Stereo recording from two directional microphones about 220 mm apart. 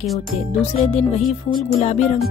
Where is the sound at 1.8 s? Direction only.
30° left (ahead or behind).